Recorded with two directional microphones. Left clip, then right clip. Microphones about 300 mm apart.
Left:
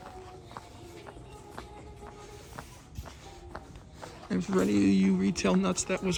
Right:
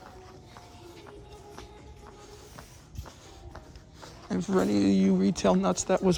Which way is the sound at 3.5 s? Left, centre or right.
Centre.